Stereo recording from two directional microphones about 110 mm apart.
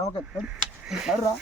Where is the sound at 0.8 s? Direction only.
5° right (ahead or behind).